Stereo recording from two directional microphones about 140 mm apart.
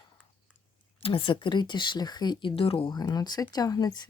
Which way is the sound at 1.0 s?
40° left (ahead or behind).